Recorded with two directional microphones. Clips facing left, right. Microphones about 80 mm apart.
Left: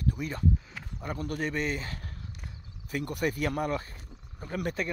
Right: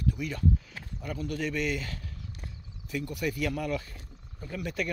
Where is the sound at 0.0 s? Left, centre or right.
Left.